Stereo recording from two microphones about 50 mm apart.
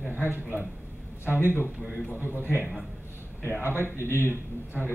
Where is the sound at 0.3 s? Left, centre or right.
Right.